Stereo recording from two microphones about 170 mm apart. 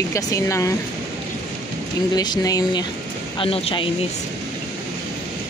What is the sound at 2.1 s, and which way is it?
Speech, 25° left (ahead or behind).